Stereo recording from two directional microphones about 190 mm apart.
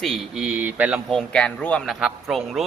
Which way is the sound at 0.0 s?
Centre (ahead or behind).